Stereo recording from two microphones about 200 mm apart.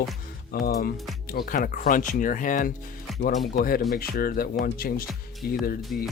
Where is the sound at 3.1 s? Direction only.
Centre (ahead or behind).